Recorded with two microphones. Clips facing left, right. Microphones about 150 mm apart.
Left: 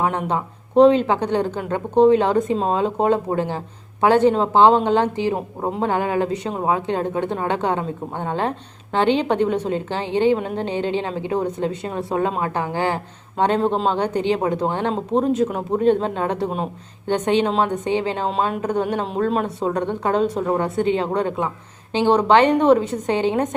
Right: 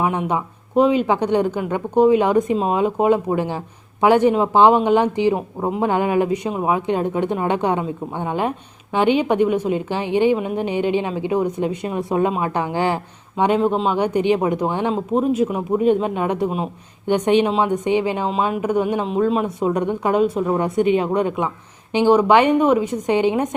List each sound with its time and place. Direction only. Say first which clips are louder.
0.0 s speech: right 1 dB; 10° right (ahead or behind)
13.3 s speech: right 1 dB; 5° right (ahead or behind)